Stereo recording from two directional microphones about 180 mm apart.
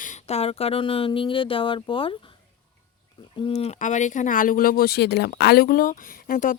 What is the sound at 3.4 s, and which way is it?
Speech, 40° left (ahead or behind).